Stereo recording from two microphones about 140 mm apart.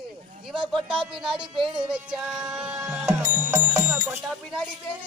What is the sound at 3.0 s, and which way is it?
Music, 15° right (ahead or behind).